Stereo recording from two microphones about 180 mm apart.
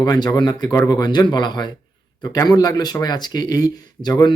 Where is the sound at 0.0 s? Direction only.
20° left (ahead or behind).